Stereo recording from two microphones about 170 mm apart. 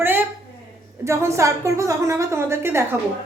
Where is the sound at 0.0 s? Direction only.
10° right (ahead or behind).